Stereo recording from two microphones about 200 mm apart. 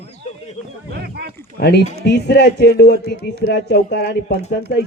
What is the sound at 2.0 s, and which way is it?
A man's voice, 60° left (ahead or behind).